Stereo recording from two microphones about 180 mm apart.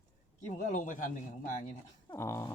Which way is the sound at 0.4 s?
45° left (ahead or behind).